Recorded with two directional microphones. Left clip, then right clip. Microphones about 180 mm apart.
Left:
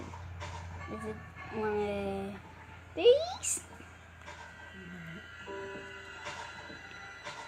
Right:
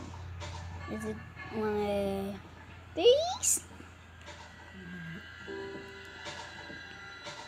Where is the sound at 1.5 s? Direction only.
15° right (ahead or behind).